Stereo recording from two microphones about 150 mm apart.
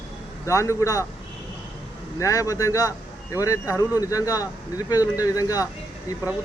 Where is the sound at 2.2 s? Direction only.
20° left (ahead or behind).